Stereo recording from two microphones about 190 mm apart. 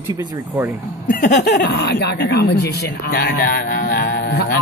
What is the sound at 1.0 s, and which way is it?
Speech, 45° left (ahead or behind).